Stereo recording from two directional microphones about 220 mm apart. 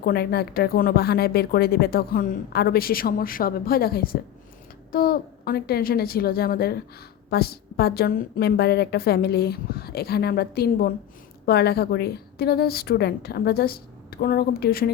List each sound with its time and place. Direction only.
0.0 s a woman's voice: 45° left (ahead or behind)